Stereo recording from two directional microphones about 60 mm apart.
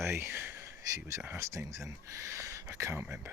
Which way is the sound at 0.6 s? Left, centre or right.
Right.